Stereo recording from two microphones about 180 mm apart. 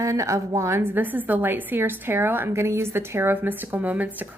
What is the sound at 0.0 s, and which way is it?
A woman's voice, 15° right (ahead or behind).